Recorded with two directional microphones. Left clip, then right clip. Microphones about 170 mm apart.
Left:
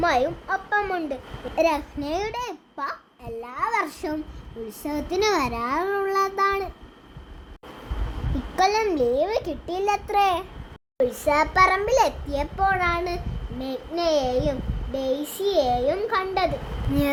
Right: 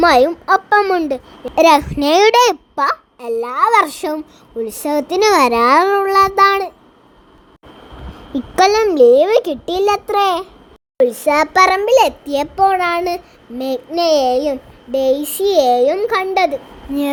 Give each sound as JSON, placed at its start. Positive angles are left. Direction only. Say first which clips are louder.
{"t": 0.0, "sound": "a child's voice", "louder": "right 11 dB", "side_deg": -70}
{"t": 8.5, "sound": "a child's voice", "louder": "right 10 dB", "side_deg": -50}